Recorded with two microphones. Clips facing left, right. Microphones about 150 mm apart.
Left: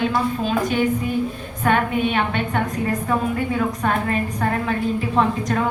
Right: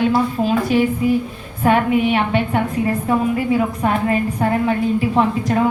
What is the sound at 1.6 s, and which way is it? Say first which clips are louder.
A woman's voice: right 4 dB; 25° right (ahead or behind).